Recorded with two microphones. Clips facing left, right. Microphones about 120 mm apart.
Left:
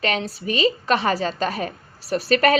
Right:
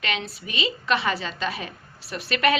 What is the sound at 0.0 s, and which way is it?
A woman's voice, 40° left (ahead or behind).